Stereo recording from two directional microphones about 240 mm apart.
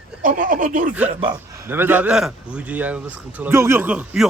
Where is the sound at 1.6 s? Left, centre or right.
Centre.